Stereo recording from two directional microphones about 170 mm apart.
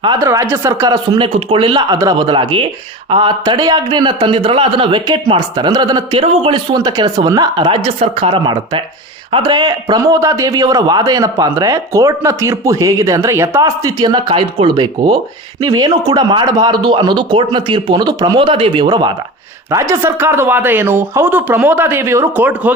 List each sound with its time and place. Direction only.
0.2 s speech: 15° right (ahead or behind)